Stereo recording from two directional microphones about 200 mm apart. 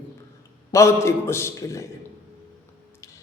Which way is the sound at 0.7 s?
15° left (ahead or behind).